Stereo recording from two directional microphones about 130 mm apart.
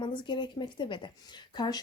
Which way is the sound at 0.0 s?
35° left (ahead or behind).